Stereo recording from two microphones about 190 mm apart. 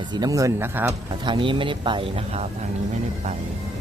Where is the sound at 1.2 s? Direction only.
25° right (ahead or behind).